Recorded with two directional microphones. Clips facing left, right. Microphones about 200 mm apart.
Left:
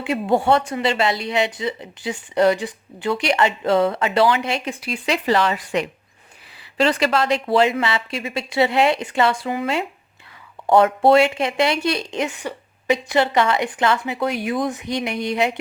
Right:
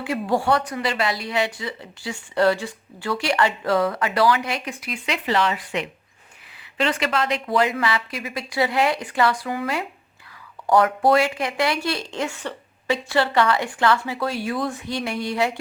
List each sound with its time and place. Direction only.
0.0 s speech: 25° left (ahead or behind)